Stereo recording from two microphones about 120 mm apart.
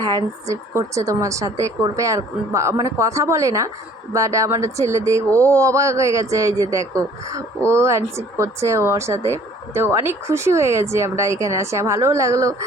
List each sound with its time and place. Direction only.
0.0 s speech: 35° right (ahead or behind)